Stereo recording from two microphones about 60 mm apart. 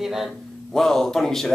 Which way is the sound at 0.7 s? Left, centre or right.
Centre.